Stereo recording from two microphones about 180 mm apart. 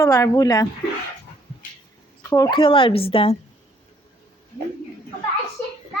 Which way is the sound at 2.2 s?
15° left (ahead or behind).